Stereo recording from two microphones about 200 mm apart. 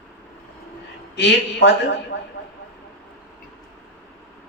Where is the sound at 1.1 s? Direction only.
60° left (ahead or behind).